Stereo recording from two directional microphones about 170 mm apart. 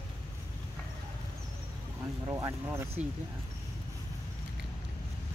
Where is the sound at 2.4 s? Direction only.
15° right (ahead or behind).